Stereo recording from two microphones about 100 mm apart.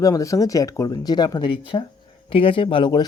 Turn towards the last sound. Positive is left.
turn(degrees=50)  # may be behind; listen again after turning